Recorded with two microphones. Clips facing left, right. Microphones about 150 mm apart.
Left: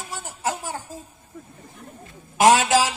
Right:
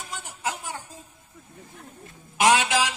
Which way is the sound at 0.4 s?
35° left (ahead or behind).